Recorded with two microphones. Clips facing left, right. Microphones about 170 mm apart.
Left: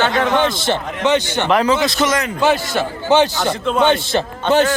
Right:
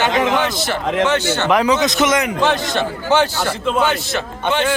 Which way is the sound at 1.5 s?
15° right (ahead or behind).